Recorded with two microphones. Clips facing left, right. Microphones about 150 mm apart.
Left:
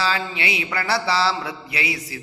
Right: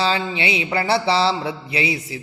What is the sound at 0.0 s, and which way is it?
Music, 25° right (ahead or behind).